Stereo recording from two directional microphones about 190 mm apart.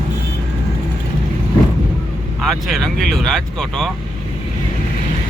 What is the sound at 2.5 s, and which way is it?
Speech, centre (ahead or behind).